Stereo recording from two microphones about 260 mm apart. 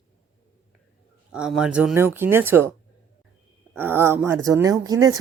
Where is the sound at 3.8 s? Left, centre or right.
Centre.